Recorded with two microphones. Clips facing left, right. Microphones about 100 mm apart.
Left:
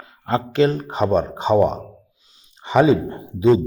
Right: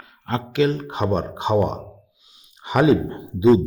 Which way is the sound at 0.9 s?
5° right (ahead or behind).